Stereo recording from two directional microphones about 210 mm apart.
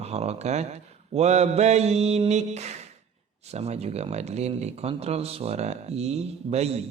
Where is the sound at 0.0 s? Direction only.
30° right (ahead or behind).